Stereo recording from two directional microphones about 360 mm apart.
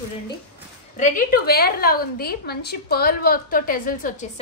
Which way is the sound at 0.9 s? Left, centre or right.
Left.